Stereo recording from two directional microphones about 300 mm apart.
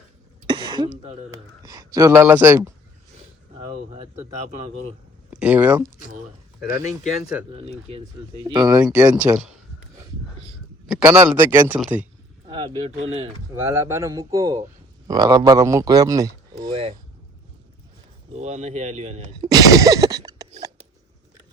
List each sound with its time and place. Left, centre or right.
0.4 s throat clearing: centre
1.0 s speech: centre
3.9 s speech: right
5.3 s speech: centre
10.8 s speech: centre
12.5 s speech: centre
18.3 s speech: right